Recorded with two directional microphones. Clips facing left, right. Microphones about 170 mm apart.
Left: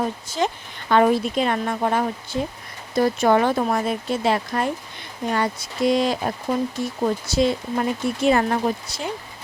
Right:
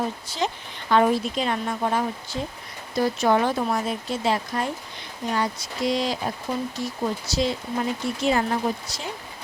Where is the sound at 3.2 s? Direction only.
60° left (ahead or behind).